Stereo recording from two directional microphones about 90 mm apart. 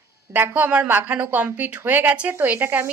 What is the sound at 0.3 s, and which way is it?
A woman's voice, 20° right (ahead or behind).